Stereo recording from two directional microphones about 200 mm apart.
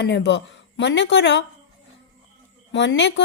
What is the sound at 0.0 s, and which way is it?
Speech, 60° left (ahead or behind).